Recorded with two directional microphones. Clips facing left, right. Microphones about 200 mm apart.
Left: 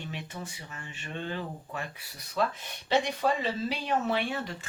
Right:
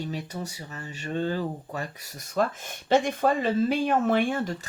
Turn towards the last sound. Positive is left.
turn(degrees=-50)  # may be behind; listen again after turning